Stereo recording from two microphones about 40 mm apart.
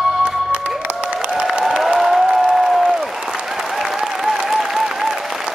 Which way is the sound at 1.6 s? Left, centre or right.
Centre.